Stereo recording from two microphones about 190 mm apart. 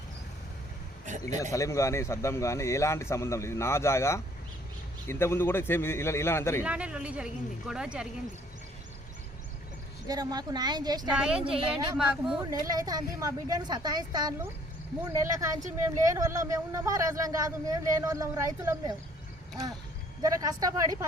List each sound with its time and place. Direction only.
1.0 s a sound: 40° right (ahead or behind)
1.5 s a man's voice: 15° left (ahead or behind)
6.7 s speech: 5° right (ahead or behind)
10.1 s a woman's voice: 20° right (ahead or behind)
11.1 s speech: 5° right (ahead or behind)
12.4 s a woman's voice: 20° right (ahead or behind)
20.2 s a woman's voice: 20° right (ahead or behind)